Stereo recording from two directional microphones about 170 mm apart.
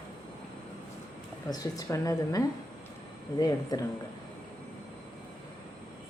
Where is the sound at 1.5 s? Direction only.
20° left (ahead or behind).